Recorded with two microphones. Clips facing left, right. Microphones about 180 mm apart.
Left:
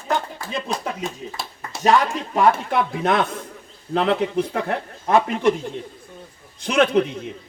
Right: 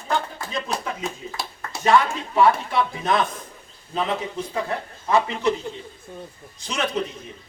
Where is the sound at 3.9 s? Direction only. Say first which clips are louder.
Left 6 dB; 70° left (ahead or behind).